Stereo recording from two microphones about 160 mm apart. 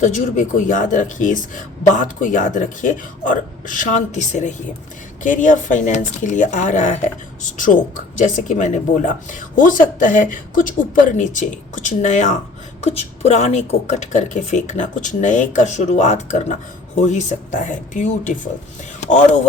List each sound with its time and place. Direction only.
0.0 s speech: 50° left (ahead or behind)